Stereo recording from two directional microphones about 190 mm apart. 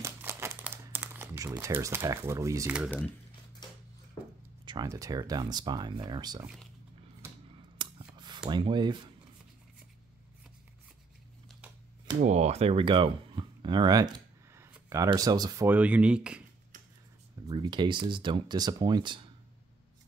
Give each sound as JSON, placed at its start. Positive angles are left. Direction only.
{"t": 0.0, "sound": "crumpling", "side_deg": -15}
{"t": 3.6, "sound": "a sound", "side_deg": 20}
{"t": 4.6, "sound": "speech", "side_deg": -20}
{"t": 7.7, "sound": "scissors", "side_deg": -25}
{"t": 8.5, "sound": "speech", "side_deg": -25}
{"t": 12.3, "sound": "speech", "side_deg": -35}
{"t": 15.7, "sound": "speech", "side_deg": -5}
{"t": 17.5, "sound": "speech", "side_deg": -25}